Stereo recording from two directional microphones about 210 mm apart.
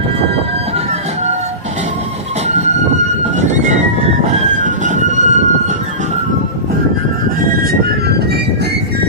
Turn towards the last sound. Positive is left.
turn(degrees=-45)  # may be behind; listen again after turning